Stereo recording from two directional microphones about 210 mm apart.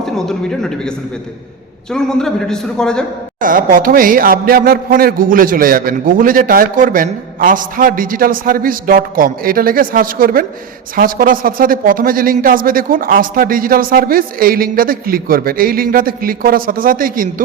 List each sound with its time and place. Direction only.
0.0 s a man's voice: 5° left (ahead or behind)
3.4 s a man's voice: 40° right (ahead or behind)